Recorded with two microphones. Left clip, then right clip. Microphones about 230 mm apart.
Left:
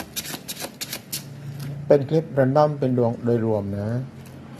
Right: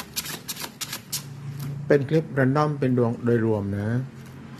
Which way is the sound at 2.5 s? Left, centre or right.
Centre.